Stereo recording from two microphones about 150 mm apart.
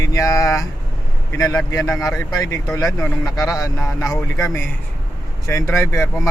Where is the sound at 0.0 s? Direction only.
25° left (ahead or behind).